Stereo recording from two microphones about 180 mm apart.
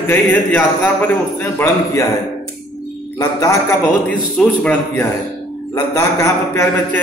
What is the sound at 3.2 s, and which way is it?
Speech, 20° left (ahead or behind).